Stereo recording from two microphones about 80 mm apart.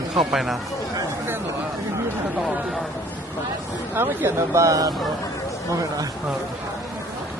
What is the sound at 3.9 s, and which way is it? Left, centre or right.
Speech, right.